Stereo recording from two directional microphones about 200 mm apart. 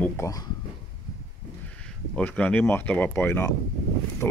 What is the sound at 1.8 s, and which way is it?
Speech, 5° left (ahead or behind).